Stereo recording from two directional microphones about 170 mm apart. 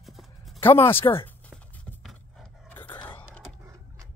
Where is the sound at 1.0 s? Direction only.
20° left (ahead or behind).